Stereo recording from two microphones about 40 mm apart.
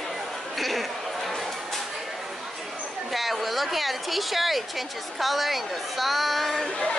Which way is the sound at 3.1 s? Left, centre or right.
Centre.